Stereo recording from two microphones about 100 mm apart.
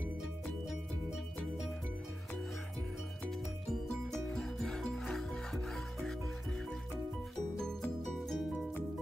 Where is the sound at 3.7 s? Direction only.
5° left (ahead or behind).